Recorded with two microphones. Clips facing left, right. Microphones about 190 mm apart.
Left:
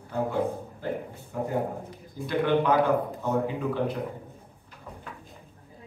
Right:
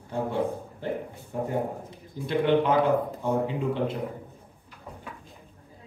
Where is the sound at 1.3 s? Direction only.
25° right (ahead or behind).